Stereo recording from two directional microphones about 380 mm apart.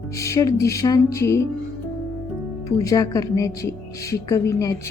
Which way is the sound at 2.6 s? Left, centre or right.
Centre.